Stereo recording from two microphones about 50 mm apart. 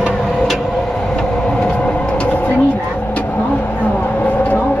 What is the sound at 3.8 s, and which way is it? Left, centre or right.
Vehicle, left.